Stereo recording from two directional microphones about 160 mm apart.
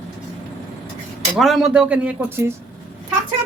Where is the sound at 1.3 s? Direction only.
Centre (ahead or behind).